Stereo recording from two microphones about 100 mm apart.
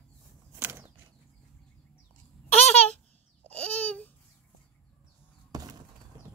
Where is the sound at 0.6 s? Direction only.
25° right (ahead or behind).